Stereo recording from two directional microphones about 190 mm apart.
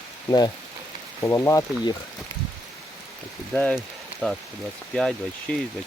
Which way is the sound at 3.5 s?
5° left (ahead or behind).